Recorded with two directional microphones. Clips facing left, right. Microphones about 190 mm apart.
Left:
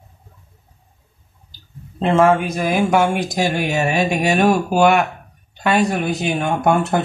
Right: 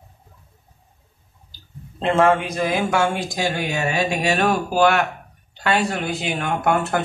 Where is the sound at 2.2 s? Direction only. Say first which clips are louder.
Left 2 dB; 10° left (ahead or behind).